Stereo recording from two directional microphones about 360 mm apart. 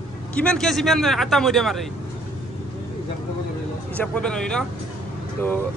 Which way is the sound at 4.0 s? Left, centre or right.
Centre.